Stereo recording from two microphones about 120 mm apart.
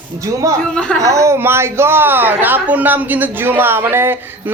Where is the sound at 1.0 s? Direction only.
25° right (ahead or behind).